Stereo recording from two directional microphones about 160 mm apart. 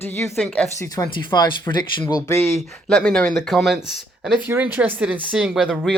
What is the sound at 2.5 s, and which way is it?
Speech, centre (ahead or behind).